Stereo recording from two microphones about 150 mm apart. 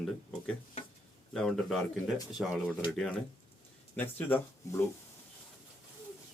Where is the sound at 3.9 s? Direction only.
15° left (ahead or behind).